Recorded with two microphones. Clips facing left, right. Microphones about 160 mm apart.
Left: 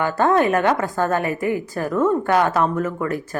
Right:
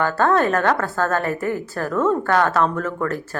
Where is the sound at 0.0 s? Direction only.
15° left (ahead or behind).